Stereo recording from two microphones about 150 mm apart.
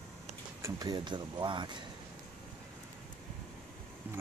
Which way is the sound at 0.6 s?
25° right (ahead or behind).